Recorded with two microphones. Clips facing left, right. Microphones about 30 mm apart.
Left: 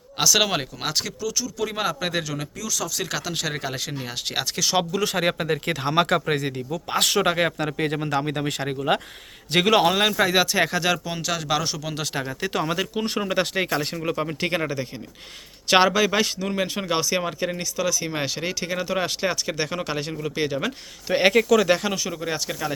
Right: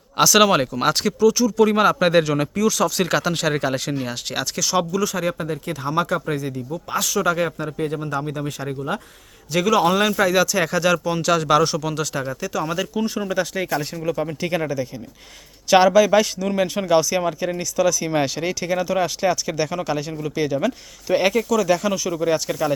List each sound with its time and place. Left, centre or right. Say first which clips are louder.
0.2 s speech: right 6 dB; centre; by 5.0 s left
5.0 s speech: left 1 dB; left
6.9 s speech: even; left
7.6 s speech: even; left
7.9 s speech: left 1 dB; left
9.5 s speech: even; left
9.8 s speech: right 2 dB; centre
12.6 s speech: right 1 dB; left
13.2 s speech: even; left
14.0 s speech: right 2 dB; left
21.3 s speech: left 1 dB; left
21.8 s speech: right 4 dB; centre
22.1 s speech: right 7 dB; centre